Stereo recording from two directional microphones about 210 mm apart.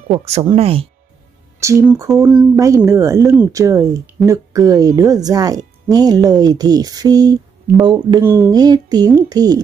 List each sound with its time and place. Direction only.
0.1 s speech: 30° right (ahead or behind)
1.6 s speech: 15° right (ahead or behind)